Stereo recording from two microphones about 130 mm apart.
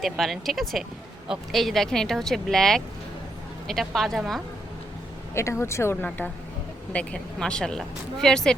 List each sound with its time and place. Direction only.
0.0 s speech: centre (ahead or behind)
5.3 s speech: 20° left (ahead or behind); by 8.5 s 5° left (ahead or behind)